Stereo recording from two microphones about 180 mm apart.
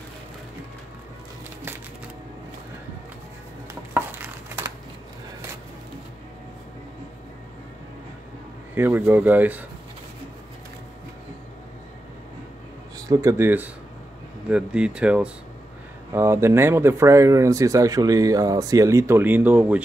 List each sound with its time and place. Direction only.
3.9 s a sound: 15° right (ahead or behind)
8.7 s speech: 10° right (ahead or behind)
12.9 s speech: 20° right (ahead or behind)